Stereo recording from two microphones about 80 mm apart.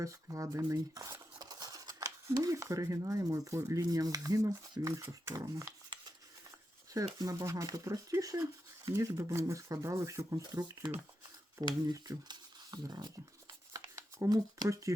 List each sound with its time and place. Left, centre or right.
0.0 s speech: right
1.4 s a sound: right
3.7 s speech: right
6.9 s speech: right
11.9 s speech: right
13.7 s shuffling cards: right